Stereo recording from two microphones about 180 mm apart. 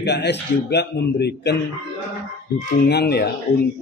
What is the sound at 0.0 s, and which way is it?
Speech, 70° left (ahead or behind).